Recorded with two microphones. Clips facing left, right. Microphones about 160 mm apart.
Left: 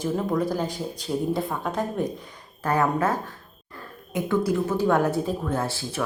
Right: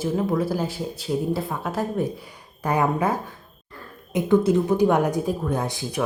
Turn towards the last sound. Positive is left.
turn(degrees=-15)  # may be behind; listen again after turning